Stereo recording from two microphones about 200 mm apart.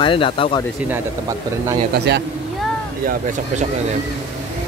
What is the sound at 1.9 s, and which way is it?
Speech, 60° right (ahead or behind).